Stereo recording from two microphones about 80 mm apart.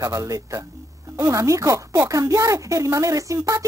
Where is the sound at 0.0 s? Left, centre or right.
Right.